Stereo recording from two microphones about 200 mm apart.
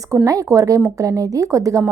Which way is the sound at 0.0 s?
15° right (ahead or behind).